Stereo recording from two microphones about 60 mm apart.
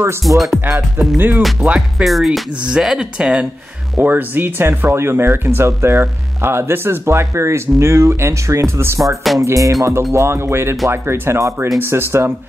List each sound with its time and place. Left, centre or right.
0.2 s music: centre
0.7 s speech: right
1.6 s speech: centre
2.0 s music: centre
2.5 s speech: centre
4.0 s speech: right
9.4 s music: right
10.1 s speech: right